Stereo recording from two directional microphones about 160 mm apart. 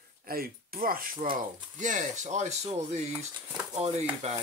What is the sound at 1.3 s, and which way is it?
Speech, 50° right (ahead or behind).